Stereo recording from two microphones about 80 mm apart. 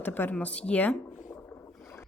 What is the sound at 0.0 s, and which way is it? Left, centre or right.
Speech, left.